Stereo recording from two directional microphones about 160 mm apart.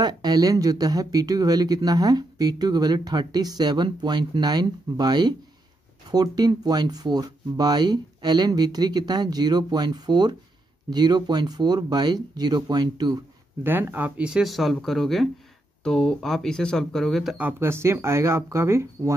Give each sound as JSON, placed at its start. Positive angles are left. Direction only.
{"t": 0.0, "sound": "speech", "side_deg": -25}
{"t": 13.7, "sound": "speech", "side_deg": -10}
{"t": 17.4, "sound": "speech", "side_deg": -15}